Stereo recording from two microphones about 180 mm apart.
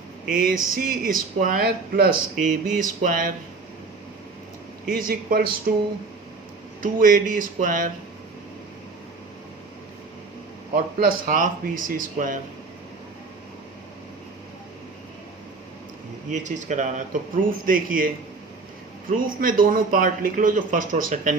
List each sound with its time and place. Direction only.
0.3 s speech: 50° right (ahead or behind)
4.9 s speech: 50° right (ahead or behind)
6.8 s speech: 50° right (ahead or behind)
10.8 s speech: 50° right (ahead or behind)
16.3 s speech: 40° right (ahead or behind)
19.1 s speech: 50° right (ahead or behind)